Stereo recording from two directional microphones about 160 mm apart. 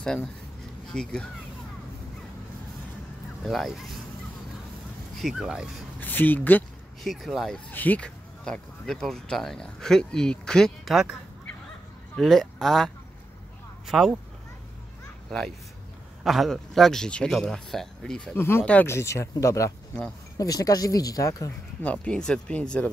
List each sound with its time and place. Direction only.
0.0 s speech: 5° left (ahead or behind)
3.4 s speech: centre (ahead or behind)
5.1 s speech: centre (ahead or behind)
5.9 s speech: 10° left (ahead or behind)
7.0 s speech: centre (ahead or behind)
12.2 s speech: centre (ahead or behind)
15.2 s speech: 5° left (ahead or behind); by 21.5 s 20° left (ahead or behind)
21.8 s speech: 10° left (ahead or behind)